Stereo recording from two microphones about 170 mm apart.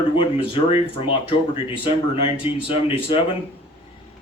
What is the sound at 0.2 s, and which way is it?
Speech, 30° left (ahead or behind).